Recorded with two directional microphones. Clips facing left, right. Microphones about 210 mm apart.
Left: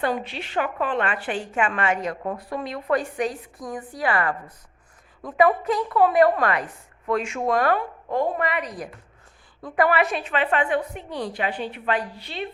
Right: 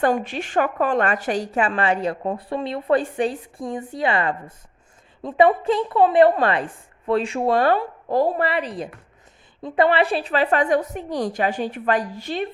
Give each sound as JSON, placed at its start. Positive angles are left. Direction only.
{"t": 0.0, "sound": "a woman's voice", "side_deg": -50}